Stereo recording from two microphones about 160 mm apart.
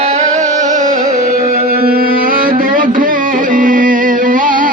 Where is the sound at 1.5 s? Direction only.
70° right (ahead or behind).